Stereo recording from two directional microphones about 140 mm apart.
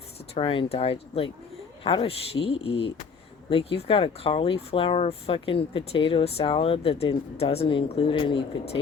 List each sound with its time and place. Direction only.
0.3 s speech: 40° left (ahead or behind)